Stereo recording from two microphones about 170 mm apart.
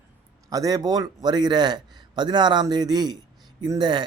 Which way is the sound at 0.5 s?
20° right (ahead or behind).